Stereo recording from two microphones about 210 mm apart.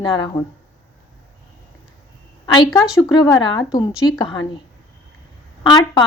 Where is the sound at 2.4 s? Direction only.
20° left (ahead or behind).